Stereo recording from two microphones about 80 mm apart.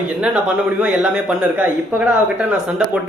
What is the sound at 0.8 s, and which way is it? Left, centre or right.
Speech, centre.